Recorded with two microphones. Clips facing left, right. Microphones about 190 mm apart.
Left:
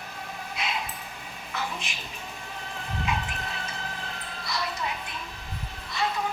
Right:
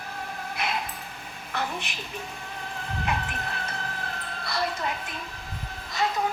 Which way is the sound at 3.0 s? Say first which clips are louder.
Right 1 dB; 60° right (ahead or behind).